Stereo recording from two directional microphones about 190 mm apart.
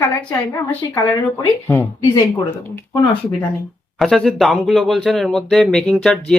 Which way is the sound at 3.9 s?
Centre (ahead or behind).